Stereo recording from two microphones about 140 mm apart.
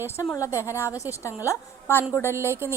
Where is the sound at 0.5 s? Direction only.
20° left (ahead or behind).